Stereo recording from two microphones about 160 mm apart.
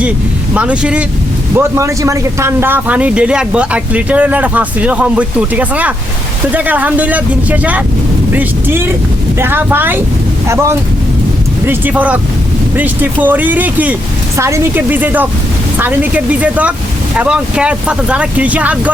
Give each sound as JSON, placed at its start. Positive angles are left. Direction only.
{"t": 0.5, "sound": "speech", "side_deg": -5}
{"t": 1.5, "sound": "speech", "side_deg": -15}